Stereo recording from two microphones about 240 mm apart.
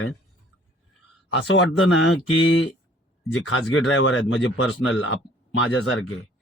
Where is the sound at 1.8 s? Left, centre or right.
Left.